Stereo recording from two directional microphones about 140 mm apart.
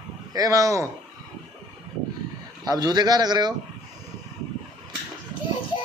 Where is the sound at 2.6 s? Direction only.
25° right (ahead or behind).